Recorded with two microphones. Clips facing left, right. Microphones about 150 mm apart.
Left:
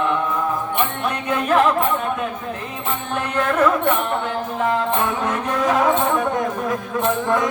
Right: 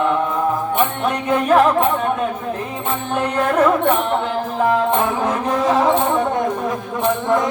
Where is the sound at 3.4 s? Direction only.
30° right (ahead or behind).